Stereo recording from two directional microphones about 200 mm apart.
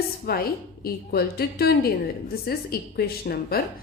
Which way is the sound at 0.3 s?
50° left (ahead or behind).